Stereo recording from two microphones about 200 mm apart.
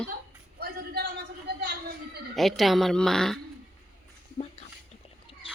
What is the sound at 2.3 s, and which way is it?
Speech, centre (ahead or behind).